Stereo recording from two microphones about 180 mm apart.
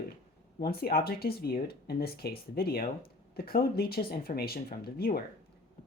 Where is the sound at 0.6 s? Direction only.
55° left (ahead or behind).